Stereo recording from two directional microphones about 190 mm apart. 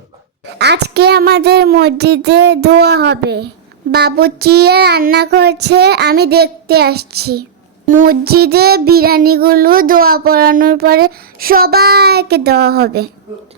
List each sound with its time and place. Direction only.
0.6 s child singing: 60° right (ahead or behind)